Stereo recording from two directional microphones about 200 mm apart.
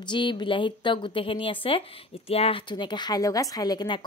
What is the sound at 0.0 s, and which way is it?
Speech, 25° left (ahead or behind).